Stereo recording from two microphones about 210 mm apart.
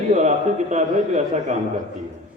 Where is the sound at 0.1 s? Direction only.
35° right (ahead or behind).